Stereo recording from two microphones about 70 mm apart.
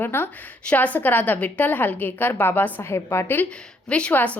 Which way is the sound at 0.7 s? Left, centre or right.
Left.